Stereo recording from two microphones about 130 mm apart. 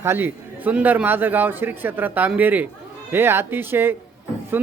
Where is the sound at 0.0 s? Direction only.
15° right (ahead or behind).